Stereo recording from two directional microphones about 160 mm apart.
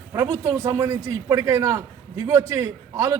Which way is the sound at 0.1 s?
20° right (ahead or behind).